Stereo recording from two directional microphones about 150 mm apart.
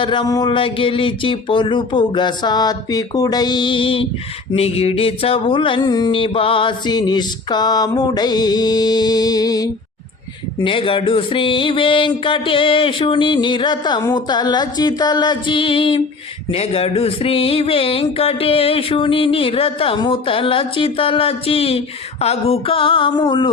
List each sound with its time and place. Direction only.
0.0 s speech: 30° left (ahead or behind)
4.5 s a sound: 40° left (ahead or behind); by 9.6 s 25° left (ahead or behind)
10.6 s speech: 35° left (ahead or behind)